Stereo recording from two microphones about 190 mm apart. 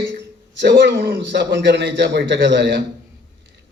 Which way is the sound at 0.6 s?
65° right (ahead or behind).